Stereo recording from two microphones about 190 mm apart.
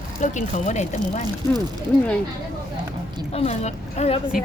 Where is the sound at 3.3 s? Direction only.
35° left (ahead or behind).